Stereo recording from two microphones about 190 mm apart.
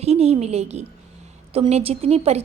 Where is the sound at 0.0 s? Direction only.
35° right (ahead or behind).